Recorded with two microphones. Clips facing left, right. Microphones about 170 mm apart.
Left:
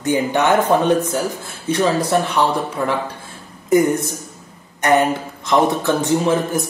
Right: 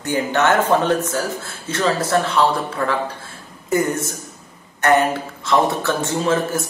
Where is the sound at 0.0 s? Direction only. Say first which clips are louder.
Left 2 dB; 15° left (ahead or behind).